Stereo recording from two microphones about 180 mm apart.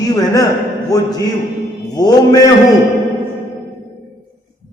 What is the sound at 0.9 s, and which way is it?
A man's voice, 20° left (ahead or behind).